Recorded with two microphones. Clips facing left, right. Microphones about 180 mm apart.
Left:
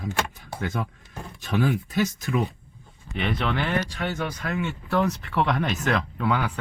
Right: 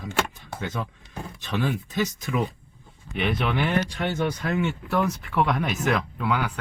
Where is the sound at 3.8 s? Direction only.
20° right (ahead or behind).